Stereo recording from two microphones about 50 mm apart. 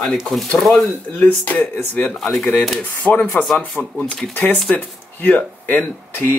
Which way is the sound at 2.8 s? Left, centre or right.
Left.